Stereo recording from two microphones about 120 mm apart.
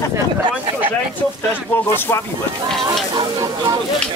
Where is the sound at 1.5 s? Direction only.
20° left (ahead or behind).